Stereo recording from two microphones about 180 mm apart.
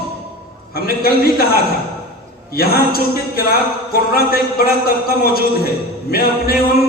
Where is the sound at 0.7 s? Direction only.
55° left (ahead or behind).